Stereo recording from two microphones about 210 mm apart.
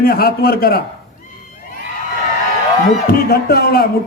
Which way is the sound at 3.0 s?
45° left (ahead or behind).